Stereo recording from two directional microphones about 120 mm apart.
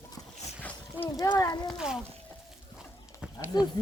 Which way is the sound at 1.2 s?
30° left (ahead or behind).